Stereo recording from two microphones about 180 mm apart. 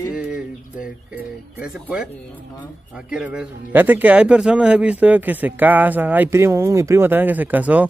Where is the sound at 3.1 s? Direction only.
5° right (ahead or behind).